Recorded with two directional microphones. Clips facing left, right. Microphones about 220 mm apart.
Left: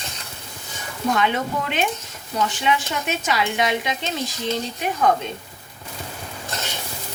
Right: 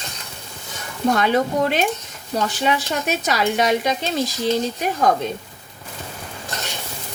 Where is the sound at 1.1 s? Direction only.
40° right (ahead or behind).